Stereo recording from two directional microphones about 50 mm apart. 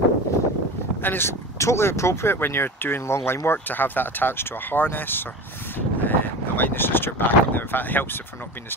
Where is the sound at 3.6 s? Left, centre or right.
Left.